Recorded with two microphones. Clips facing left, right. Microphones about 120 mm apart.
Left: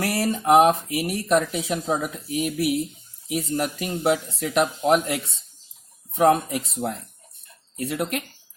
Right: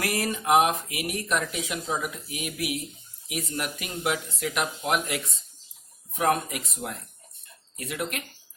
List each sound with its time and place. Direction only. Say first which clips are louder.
0.0 s speech: left 5 dB; 35° left (ahead or behind)
7.8 s speech: left 6 dB; 35° left (ahead or behind)